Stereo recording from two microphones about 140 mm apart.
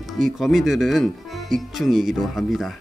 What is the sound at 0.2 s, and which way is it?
Speech, centre (ahead or behind).